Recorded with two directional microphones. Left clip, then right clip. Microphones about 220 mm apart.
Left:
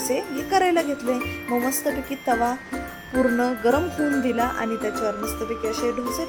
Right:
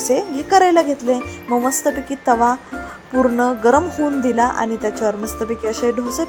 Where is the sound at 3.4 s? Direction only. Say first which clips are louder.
Right 7 dB; 15° right (ahead or behind).